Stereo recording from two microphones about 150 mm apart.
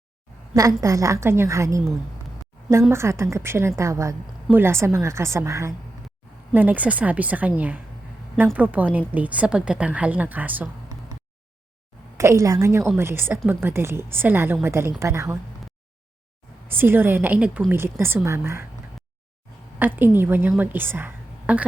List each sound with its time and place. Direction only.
0.5 s a woman's voice: 25° right (ahead or behind)
2.9 s a woman's voice: 20° right (ahead or behind)
12.1 s a woman's voice: 20° right (ahead or behind)
16.7 s speech: 15° right (ahead or behind)
19.8 s a woman's voice: 15° right (ahead or behind)